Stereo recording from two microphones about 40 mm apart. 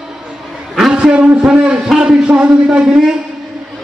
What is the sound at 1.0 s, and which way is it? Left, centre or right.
Speech, right.